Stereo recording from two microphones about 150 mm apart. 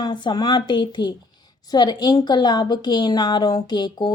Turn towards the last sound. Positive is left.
turn(degrees=30)  # may be behind; listen again after turning